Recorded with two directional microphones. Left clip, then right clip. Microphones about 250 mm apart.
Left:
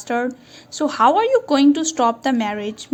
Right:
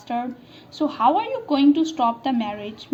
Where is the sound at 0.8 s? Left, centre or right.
Left.